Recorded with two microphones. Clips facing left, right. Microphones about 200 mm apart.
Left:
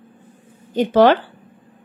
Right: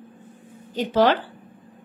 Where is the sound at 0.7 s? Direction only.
55° left (ahead or behind).